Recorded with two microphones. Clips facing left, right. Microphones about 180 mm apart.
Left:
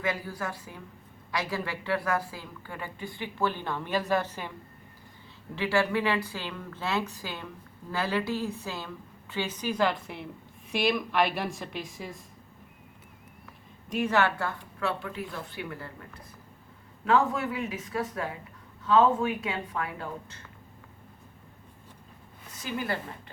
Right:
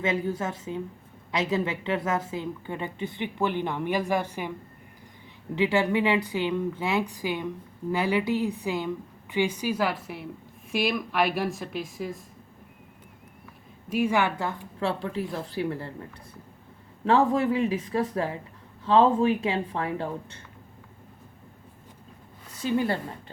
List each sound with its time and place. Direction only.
0.0 s a woman's voice: 25° right (ahead or behind)
5.5 s a woman's voice: 20° right (ahead or behind); by 12.2 s centre (ahead or behind)
13.9 s a woman's voice: 10° right (ahead or behind)
14.8 s a woman's voice: 30° right (ahead or behind)
17.1 s a woman's voice: 30° right (ahead or behind)
22.6 s a woman's voice: 30° right (ahead or behind)